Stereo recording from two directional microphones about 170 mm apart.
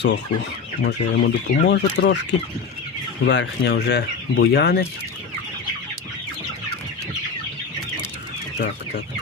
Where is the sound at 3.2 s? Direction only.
85° left.